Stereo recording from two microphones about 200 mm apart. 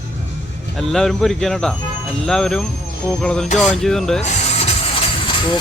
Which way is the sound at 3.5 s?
35° left (ahead or behind).